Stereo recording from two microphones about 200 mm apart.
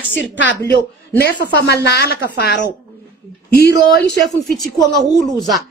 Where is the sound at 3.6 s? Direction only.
55° left (ahead or behind).